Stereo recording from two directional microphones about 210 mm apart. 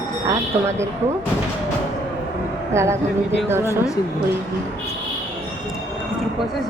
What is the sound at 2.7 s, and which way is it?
Speech, 10° right (ahead or behind).